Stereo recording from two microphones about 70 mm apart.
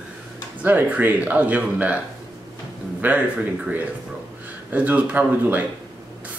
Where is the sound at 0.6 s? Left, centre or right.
Right.